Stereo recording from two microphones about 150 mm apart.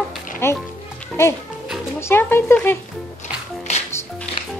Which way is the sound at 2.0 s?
15° left (ahead or behind).